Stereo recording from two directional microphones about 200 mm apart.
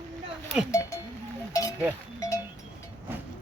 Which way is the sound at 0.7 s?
15° left (ahead or behind).